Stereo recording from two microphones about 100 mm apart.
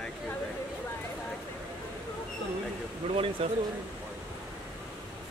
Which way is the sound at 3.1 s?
65° right (ahead or behind).